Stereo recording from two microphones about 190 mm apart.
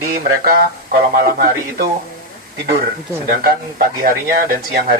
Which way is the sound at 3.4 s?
50° right (ahead or behind).